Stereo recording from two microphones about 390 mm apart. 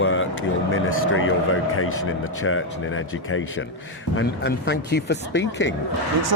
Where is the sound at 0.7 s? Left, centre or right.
Left.